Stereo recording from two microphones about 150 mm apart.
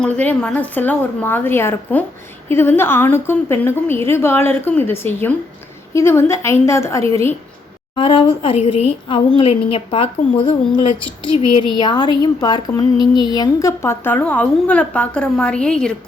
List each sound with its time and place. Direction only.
0.0 s a woman's voice: 10° left (ahead or behind)
7.9 s speech: 35° left (ahead or behind); by 16.0 s 5° left (ahead or behind)